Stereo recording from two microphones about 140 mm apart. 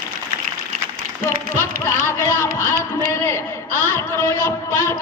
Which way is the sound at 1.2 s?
20° left (ahead or behind).